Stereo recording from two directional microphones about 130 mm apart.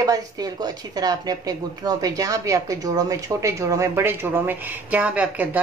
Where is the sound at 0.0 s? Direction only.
30° right (ahead or behind).